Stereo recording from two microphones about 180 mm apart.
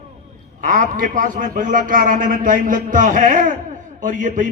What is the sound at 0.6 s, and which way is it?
A man's voice, 45° right (ahead or behind).